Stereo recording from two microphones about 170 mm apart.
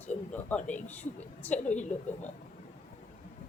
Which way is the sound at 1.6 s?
45° left (ahead or behind).